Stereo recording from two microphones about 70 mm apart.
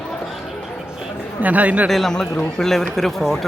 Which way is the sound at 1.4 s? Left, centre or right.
Right.